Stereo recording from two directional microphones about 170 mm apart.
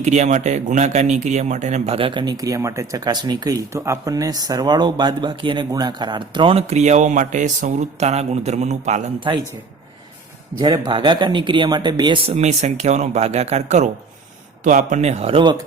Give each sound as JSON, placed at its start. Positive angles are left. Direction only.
{"t": 0.0, "sound": "speech", "side_deg": -40}
{"t": 9.3, "sound": "speech", "side_deg": -30}
{"t": 10.6, "sound": "speech", "side_deg": -25}